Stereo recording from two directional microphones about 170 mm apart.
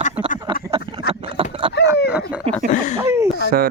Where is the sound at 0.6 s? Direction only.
30° right (ahead or behind).